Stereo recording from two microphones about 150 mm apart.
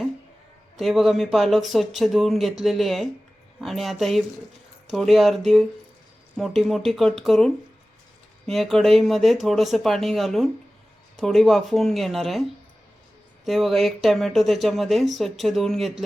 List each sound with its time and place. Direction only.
0.8 s speech: centre (ahead or behind)